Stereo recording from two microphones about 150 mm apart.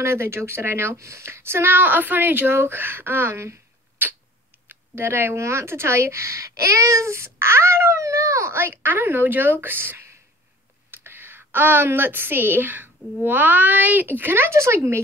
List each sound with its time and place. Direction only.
0.0 s speech: 15° right (ahead or behind)
4.0 s a sound: 15° right (ahead or behind)
4.6 s a woman's voice: 15° right (ahead or behind)